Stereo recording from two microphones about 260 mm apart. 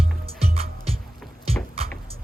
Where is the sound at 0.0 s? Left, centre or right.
Right.